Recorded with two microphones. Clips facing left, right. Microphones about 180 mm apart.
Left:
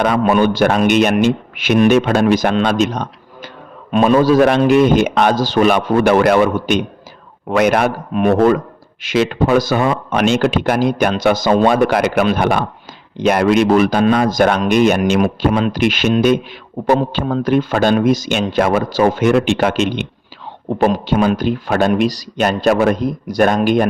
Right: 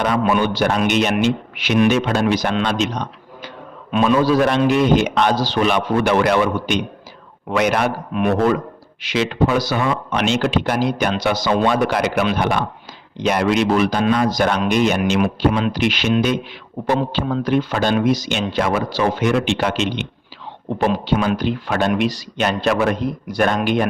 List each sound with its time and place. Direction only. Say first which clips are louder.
0.0 s speech: left 4 dB; 50° left (ahead or behind)